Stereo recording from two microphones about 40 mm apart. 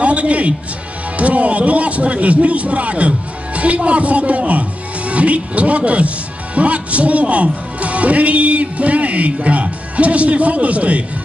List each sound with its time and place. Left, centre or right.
0.0 s a man's voice: right